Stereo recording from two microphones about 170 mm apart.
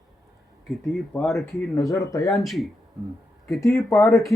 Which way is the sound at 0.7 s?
Centre (ahead or behind).